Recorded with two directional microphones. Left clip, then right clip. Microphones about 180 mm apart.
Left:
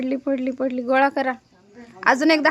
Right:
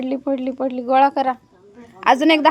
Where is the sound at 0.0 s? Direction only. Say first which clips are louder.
Right 1 dB; 5° left (ahead or behind).